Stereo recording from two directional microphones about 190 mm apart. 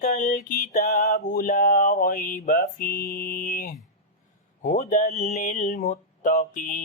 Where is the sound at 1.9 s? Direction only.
50° left (ahead or behind).